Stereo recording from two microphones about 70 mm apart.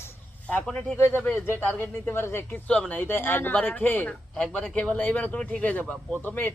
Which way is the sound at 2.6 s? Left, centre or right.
Centre.